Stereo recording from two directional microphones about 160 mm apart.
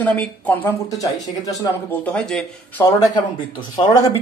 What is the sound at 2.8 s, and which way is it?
Speech, 25° left (ahead or behind).